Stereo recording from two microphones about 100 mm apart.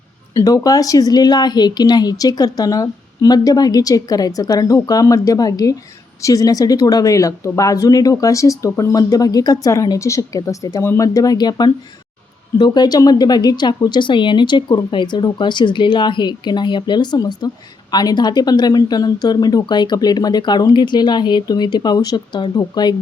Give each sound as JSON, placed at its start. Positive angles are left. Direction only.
{"t": 0.3, "sound": "a woman's voice", "side_deg": 35}